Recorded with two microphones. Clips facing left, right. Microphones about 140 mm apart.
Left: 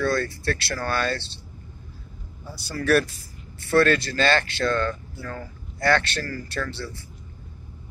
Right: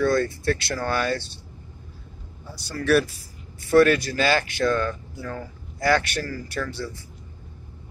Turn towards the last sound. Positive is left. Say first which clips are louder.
# right 1 dB
turn(degrees=-15)  # may be behind; listen again after turning